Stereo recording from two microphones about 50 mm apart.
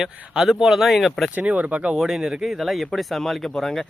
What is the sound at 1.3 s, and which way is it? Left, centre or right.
Speech, right.